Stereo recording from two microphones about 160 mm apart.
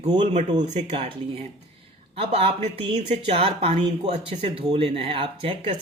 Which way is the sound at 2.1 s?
35° right (ahead or behind).